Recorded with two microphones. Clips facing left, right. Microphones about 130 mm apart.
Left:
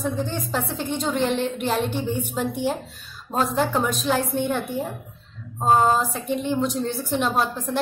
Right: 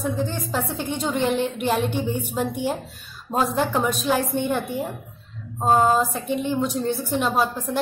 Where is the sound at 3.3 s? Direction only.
5° right (ahead or behind).